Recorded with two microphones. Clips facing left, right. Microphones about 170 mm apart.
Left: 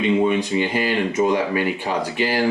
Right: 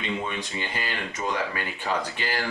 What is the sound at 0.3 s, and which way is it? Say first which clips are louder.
Speech: left 12 dB; 15° left (ahead or behind).